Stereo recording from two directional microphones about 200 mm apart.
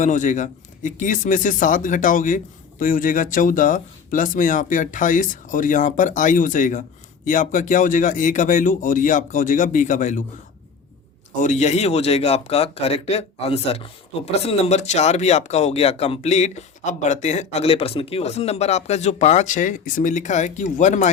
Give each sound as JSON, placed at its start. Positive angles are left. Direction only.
{"t": 0.0, "sound": "a man's voice", "side_deg": 40}
{"t": 11.3, "sound": "a man's voice", "side_deg": 35}